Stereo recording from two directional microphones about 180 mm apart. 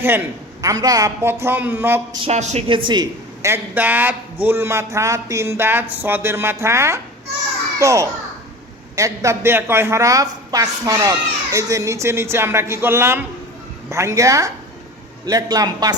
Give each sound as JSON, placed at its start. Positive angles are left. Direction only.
{"t": 0.0, "sound": "speech", "side_deg": -10}
{"t": 2.2, "sound": "a man's voice", "side_deg": -40}